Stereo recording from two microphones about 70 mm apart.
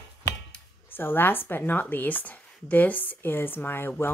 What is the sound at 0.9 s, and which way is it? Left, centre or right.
Speech, left.